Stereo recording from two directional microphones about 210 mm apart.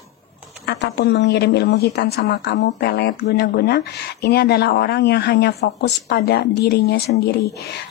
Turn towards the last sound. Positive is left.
turn(degrees=50)  # may be behind; listen again after turning